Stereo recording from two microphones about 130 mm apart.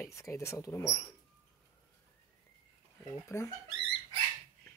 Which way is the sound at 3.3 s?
20° left (ahead or behind).